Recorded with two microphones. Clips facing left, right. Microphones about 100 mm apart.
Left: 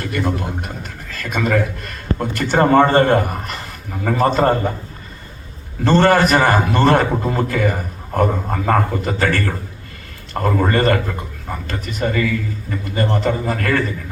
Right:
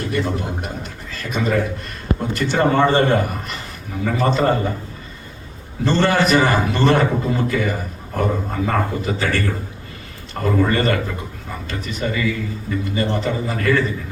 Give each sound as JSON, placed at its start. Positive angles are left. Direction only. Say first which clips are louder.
{"t": 0.1, "sound": "a man's voice", "louder": "left 2 dB", "side_deg": 55}
{"t": 5.8, "sound": "a man's voice", "louder": "left 4 dB", "side_deg": 50}
{"t": 10.4, "sound": "a man's voice", "louder": "left 1 dB", "side_deg": 50}